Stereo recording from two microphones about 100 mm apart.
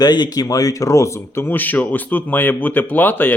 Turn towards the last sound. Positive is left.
turn(degrees=20)  # may be behind; listen again after turning